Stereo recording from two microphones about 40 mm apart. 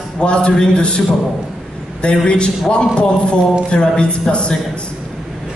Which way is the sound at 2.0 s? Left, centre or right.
Left.